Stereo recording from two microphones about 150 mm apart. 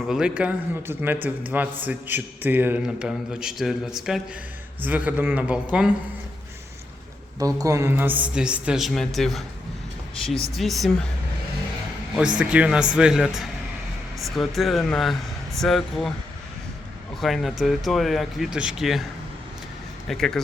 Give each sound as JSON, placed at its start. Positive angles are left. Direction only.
{"t": 0.1, "sound": "a man's voice", "side_deg": -5}
{"t": 7.3, "sound": "a man's voice", "side_deg": -25}
{"t": 10.3, "sound": "speech", "side_deg": -20}
{"t": 10.6, "sound": "speech", "side_deg": 0}
{"t": 12.4, "sound": "a man's voice", "side_deg": -10}
{"t": 17.2, "sound": "speech", "side_deg": 0}
{"t": 20.1, "sound": "speech", "side_deg": 0}